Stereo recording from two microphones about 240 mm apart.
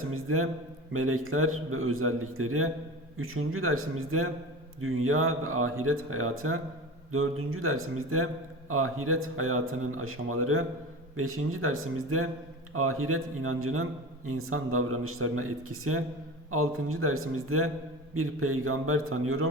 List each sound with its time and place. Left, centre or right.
0.1 s speech: right